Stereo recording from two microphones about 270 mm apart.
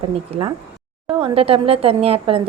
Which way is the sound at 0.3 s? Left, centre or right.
Right.